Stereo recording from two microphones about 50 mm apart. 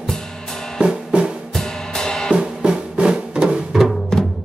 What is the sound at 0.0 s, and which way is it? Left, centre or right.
Music, centre.